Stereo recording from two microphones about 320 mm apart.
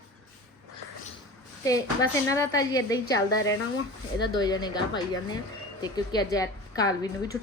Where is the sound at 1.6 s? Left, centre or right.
Centre.